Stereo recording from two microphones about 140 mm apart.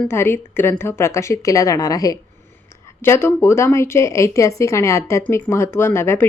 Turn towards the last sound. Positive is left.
turn(degrees=15)  # may be behind; listen again after turning